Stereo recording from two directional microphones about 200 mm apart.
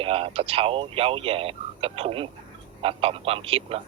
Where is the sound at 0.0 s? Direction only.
30° right (ahead or behind).